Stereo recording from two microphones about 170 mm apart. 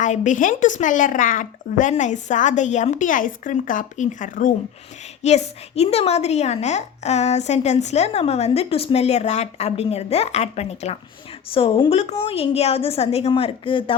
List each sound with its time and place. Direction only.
0.0 s a woman's voice: 45° left (ahead or behind); by 13.9 s 30° left (ahead or behind)